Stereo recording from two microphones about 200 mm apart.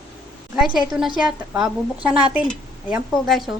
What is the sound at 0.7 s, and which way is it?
A woman's voice, centre (ahead or behind).